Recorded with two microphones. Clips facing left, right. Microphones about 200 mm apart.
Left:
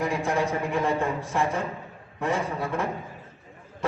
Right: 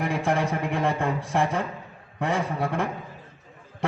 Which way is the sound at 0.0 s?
55° right (ahead or behind).